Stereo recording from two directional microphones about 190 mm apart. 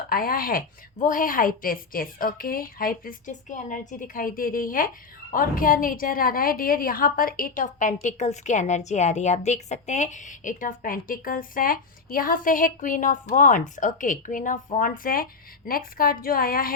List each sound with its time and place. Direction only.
0.1 s a woman's voice: 50° left (ahead or behind)